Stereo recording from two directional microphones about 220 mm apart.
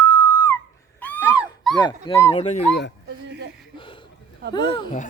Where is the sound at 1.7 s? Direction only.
20° left (ahead or behind).